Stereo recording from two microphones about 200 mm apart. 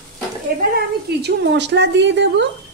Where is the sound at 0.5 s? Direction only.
50° right (ahead or behind).